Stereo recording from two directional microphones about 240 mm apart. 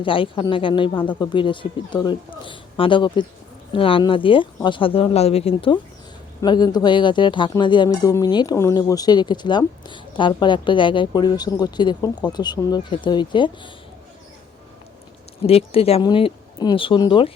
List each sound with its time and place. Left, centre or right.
0.0 s speech: left
15.4 s speech: left